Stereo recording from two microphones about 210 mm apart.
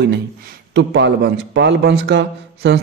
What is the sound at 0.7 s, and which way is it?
A man's voice, 55° right (ahead or behind).